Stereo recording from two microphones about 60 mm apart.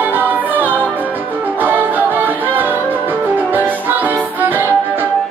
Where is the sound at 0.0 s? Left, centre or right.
Right.